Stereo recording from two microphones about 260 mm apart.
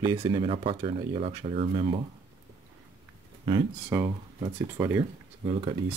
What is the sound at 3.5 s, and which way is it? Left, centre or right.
Speech, centre.